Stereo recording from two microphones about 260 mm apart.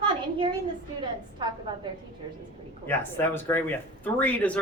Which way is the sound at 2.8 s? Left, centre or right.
Centre.